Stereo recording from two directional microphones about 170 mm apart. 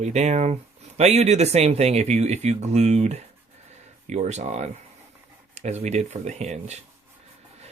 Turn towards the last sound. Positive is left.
turn(degrees=-40)  # may be behind; listen again after turning